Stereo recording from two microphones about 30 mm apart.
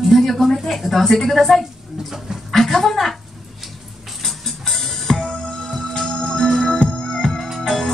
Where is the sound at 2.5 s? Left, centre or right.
Centre.